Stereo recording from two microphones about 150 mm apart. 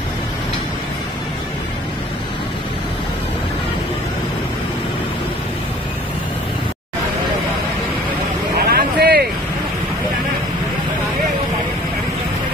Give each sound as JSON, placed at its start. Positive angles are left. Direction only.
{"t": 8.5, "sound": "vehicle", "side_deg": -90}